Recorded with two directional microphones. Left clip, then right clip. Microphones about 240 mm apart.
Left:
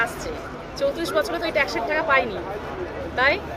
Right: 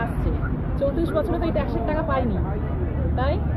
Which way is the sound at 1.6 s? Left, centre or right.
Centre.